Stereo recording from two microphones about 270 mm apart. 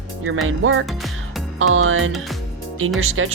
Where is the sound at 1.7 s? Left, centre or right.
Right.